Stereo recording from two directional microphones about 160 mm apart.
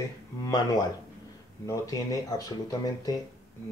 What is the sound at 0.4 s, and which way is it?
Speech, 25° left (ahead or behind).